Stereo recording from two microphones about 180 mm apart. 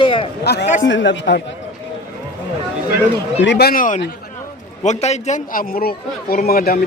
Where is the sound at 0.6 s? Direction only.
40° left (ahead or behind).